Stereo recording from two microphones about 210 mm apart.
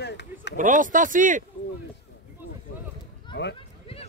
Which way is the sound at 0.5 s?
40° right (ahead or behind).